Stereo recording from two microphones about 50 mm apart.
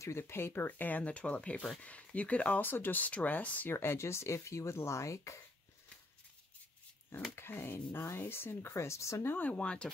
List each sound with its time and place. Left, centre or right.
0.0 s speech: left
0.7 s speech: left
3.7 s speech: left
7.3 s speech: left
9.3 s speech: left